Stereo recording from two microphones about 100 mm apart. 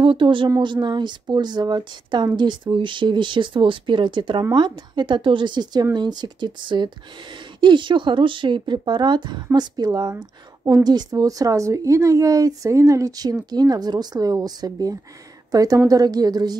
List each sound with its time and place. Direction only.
0.0 s speech: 60° right (ahead or behind); by 10.1 s 45° right (ahead or behind)
10.1 s speech: 30° right (ahead or behind)
10.8 s speech: 45° right (ahead or behind)